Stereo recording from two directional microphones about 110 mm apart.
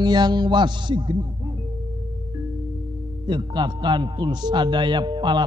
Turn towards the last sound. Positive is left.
turn(degrees=-45)  # may be behind; listen again after turning